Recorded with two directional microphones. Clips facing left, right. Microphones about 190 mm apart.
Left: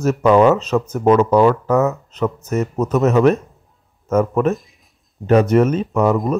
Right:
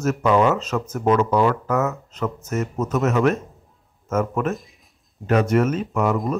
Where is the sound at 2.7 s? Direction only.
60° left (ahead or behind).